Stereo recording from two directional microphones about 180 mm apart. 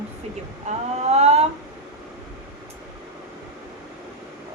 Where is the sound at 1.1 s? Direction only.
35° right (ahead or behind).